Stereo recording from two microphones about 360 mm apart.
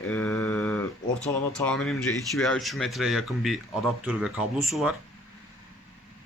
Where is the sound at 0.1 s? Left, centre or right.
Centre.